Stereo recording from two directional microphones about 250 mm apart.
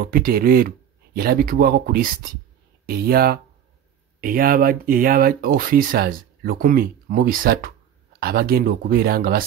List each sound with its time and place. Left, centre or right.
0.0 s speech: right